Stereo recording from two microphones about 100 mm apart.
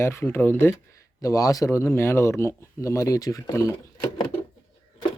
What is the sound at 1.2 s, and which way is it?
Speech, 35° left (ahead or behind).